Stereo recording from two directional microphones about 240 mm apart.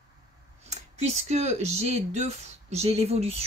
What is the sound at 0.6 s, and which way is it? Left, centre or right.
Speech, right.